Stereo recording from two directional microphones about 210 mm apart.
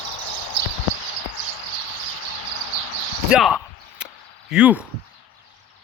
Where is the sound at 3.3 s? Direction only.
Centre (ahead or behind).